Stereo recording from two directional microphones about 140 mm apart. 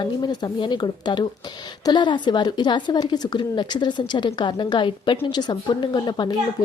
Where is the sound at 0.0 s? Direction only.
30° left (ahead or behind).